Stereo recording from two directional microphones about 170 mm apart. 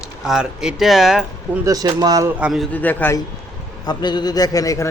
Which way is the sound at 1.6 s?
20° right (ahead or behind).